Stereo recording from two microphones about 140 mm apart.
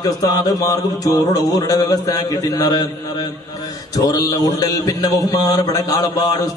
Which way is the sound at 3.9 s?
25° left (ahead or behind).